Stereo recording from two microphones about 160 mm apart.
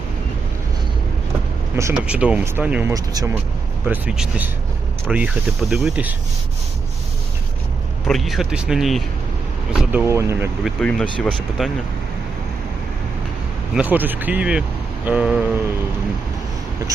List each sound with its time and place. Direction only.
1.7 s speech: 15° right (ahead or behind)
2.9 s speech: 25° right (ahead or behind)
3.8 s speech: 5° right (ahead or behind)
8.0 s speech: centre (ahead or behind)
9.7 s speech: 10° right (ahead or behind)
10.6 s speech: 5° left (ahead or behind)
13.7 s speech: 10° right (ahead or behind)